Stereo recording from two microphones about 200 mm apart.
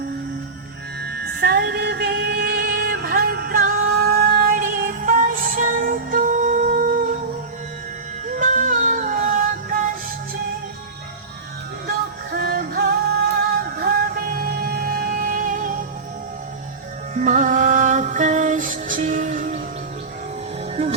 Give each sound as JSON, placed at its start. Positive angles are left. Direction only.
{"t": 1.0, "sound": "music", "side_deg": -55}
{"t": 8.3, "sound": "music", "side_deg": -40}
{"t": 11.9, "sound": "music", "side_deg": -50}
{"t": 17.2, "sound": "music", "side_deg": -40}